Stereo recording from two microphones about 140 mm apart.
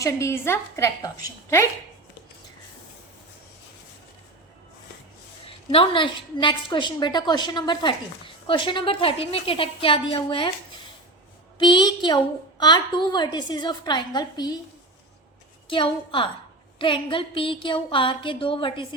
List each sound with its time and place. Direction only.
0.0 s a woman's voice: 20° left (ahead or behind)
5.5 s a woman's voice: 40° left (ahead or behind)
11.6 s a woman's voice: 30° left (ahead or behind)
15.7 s a woman's voice: 40° left (ahead or behind)